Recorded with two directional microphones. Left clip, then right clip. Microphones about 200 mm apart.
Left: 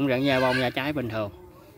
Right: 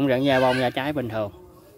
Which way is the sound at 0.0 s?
10° right (ahead or behind).